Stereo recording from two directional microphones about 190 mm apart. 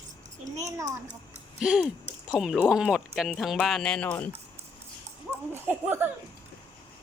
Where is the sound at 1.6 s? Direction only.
5° right (ahead or behind).